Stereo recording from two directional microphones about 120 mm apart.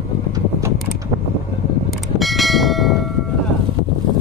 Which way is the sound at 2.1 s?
Centre (ahead or behind).